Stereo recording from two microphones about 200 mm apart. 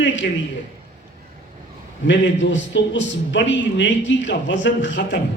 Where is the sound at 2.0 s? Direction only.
65° left (ahead or behind).